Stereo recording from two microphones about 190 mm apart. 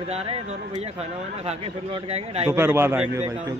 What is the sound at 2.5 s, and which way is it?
Speech, 10° right (ahead or behind).